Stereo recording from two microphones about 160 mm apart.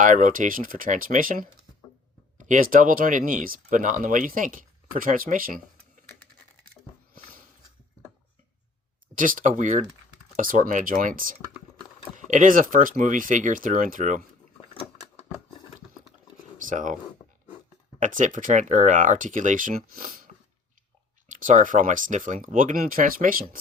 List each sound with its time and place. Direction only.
0.0 s speech: 55° right (ahead or behind)
9.1 s speech: 55° right (ahead or behind)
16.6 s speech: 50° right (ahead or behind)
18.0 s speech: 55° right (ahead or behind)
21.3 s speech: 50° right (ahead or behind)